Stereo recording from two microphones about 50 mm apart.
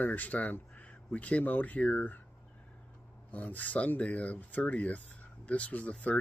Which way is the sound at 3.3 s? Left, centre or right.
Left.